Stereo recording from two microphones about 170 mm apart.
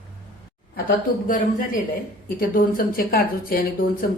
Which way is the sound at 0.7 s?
55° left (ahead or behind).